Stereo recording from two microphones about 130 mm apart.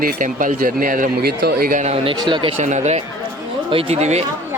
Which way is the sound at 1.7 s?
75° right (ahead or behind).